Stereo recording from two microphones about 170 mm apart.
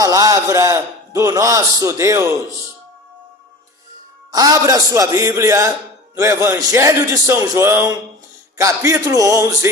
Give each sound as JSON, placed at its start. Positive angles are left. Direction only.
{"t": 0.0, "sound": "a man's voice", "side_deg": -20}
{"t": 4.3, "sound": "a man's voice", "side_deg": -20}